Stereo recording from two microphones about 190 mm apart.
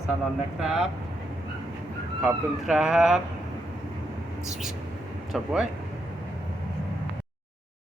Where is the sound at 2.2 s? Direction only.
5° right (ahead or behind).